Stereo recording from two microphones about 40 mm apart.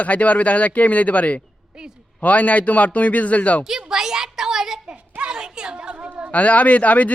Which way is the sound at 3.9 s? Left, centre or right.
Centre.